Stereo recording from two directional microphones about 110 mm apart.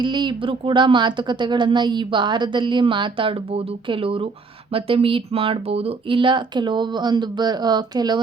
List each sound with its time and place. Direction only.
0.0 s a woman's voice: 45° right (ahead or behind)